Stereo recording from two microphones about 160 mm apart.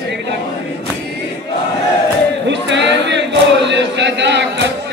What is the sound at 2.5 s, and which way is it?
Chant, 90° right.